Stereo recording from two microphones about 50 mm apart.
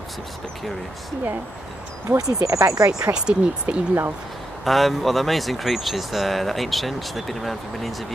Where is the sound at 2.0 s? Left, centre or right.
Right.